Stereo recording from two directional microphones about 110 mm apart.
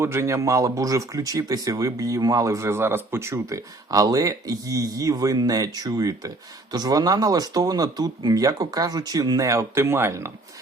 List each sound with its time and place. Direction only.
0.0 s speech: 25° right (ahead or behind)